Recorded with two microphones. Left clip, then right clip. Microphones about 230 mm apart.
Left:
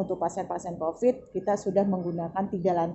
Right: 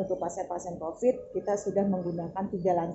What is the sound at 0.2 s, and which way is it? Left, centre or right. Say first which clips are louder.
A woman's voice: left 3 dB; left.